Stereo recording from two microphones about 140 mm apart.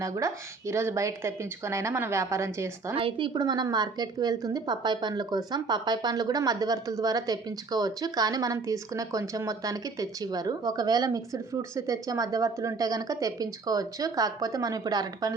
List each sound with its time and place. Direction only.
0.0 s a woman's voice: 20° right (ahead or behind)
2.9 s a woman's voice: 40° right (ahead or behind)